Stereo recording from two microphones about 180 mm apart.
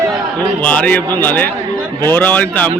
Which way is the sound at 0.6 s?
10° left (ahead or behind).